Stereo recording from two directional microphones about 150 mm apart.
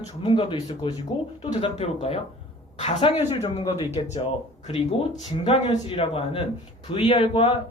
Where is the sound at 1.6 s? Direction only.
45° left (ahead or behind).